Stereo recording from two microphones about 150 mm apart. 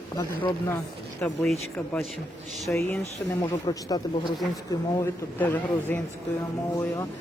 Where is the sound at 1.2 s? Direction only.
5° left (ahead or behind).